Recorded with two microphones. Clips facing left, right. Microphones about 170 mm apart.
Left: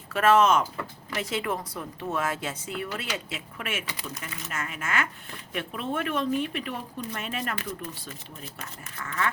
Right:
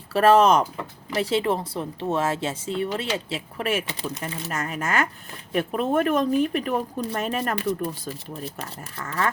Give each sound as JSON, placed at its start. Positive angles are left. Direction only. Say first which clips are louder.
{"t": 0.1, "sound": "speech", "louder": "right 4 dB", "side_deg": -35}